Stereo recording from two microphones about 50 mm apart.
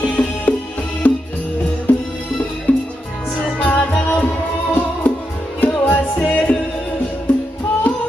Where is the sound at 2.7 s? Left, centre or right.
Left.